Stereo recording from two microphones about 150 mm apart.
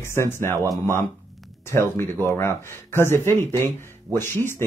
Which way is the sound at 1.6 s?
15° left (ahead or behind).